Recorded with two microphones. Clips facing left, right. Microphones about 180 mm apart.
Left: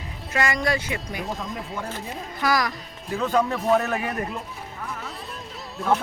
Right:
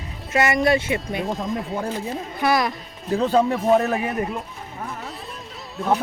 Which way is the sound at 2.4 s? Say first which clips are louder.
Right 3 dB; 25° right (ahead or behind).